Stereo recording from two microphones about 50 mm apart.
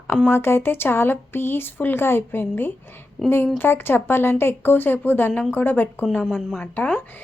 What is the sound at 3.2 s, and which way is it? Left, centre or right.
Speech, centre.